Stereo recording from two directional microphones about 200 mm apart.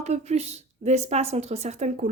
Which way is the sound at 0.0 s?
35° right (ahead or behind).